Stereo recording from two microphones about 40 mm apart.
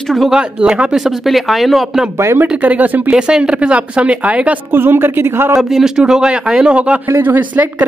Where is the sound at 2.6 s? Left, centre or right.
Right.